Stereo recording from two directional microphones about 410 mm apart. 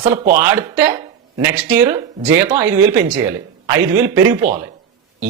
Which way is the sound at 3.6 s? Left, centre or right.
Centre.